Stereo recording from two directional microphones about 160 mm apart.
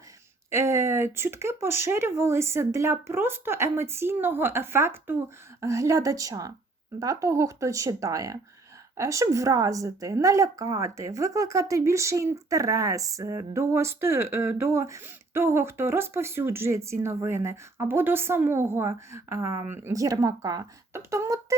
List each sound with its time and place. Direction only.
0.5 s a woman's voice: 15° right (ahead or behind)